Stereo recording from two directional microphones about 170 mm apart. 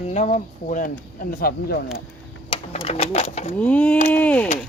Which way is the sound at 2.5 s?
35° left (ahead or behind).